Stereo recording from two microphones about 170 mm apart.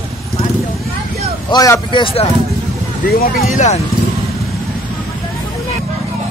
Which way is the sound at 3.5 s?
45° left (ahead or behind).